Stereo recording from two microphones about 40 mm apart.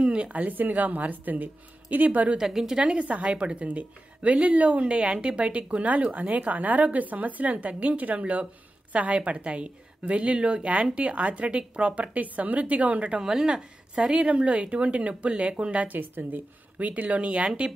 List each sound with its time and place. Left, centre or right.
0.0 s a woman's voice: right
2.3 s a woman's voice: centre
2.8 s a woman's voice: right
13.2 s a woman's voice: centre
14.2 s a woman's voice: right
15.9 s a woman's voice: right